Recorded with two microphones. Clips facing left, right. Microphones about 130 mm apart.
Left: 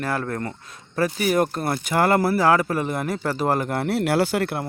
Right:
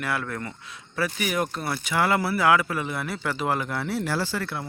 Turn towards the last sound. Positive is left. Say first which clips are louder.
# left 7 dB
turn(degrees=60)  # may be behind; listen again after turning